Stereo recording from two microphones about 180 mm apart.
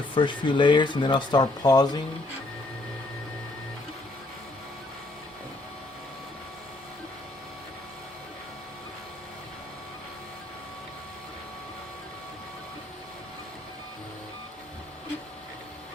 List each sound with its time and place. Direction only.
0.1 s speech: 25° left (ahead or behind)